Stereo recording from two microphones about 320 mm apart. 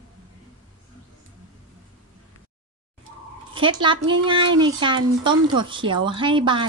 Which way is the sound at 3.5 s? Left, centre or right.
Centre.